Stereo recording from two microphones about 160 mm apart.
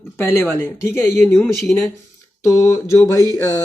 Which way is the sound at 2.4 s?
20° left (ahead or behind).